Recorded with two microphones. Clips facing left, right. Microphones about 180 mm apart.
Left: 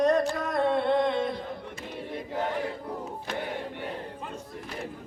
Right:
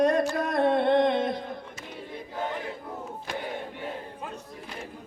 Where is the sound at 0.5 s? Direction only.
15° right (ahead or behind).